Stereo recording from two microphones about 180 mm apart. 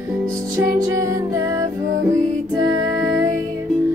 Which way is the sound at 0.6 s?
15° right (ahead or behind).